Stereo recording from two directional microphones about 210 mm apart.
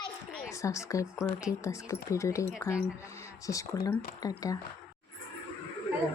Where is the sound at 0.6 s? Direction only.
15° left (ahead or behind).